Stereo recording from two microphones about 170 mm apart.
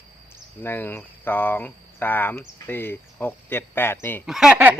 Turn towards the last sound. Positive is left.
turn(degrees=-10)  # may be behind; listen again after turning